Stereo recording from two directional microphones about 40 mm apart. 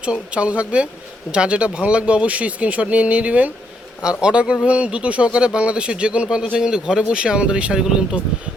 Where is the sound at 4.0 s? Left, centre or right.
Right.